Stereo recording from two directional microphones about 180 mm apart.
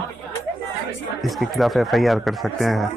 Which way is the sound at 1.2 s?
Centre (ahead or behind).